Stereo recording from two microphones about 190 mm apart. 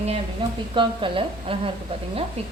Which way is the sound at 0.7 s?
25° right (ahead or behind).